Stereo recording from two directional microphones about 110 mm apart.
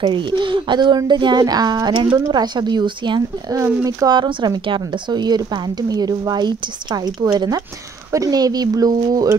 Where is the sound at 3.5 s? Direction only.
30° right (ahead or behind).